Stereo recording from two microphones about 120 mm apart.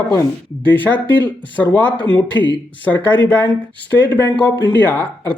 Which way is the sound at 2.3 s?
40° right (ahead or behind).